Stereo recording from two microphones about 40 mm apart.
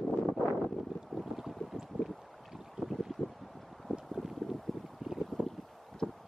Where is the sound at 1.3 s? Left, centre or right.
Centre.